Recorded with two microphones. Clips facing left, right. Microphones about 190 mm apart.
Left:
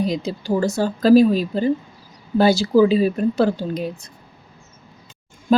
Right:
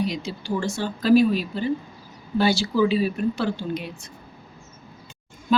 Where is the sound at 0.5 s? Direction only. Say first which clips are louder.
Left 6 dB; 40° left (ahead or behind).